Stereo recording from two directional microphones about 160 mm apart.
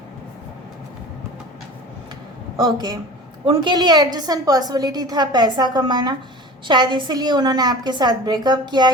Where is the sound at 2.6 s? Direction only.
25° right (ahead or behind).